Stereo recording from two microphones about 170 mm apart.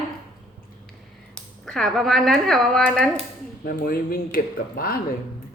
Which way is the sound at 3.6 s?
60° left (ahead or behind).